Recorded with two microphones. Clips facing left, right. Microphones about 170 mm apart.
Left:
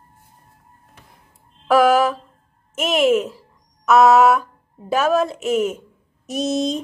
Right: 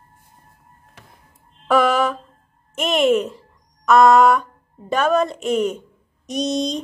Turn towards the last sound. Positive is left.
turn(degrees=5)  # may be behind; listen again after turning